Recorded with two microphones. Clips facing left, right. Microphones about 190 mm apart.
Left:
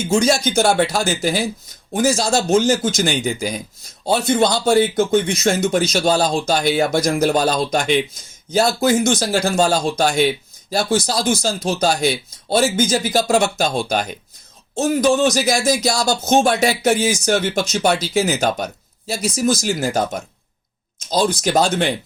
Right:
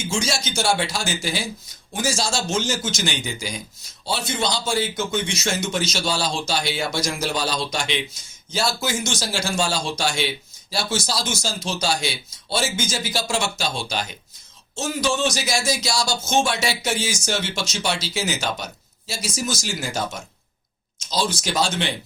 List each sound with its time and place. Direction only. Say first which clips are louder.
0.4 s a man's voice: left 7 dB; 55° left (ahead or behind)
2.0 s a man's voice: left 8 dB; 60° left (ahead or behind)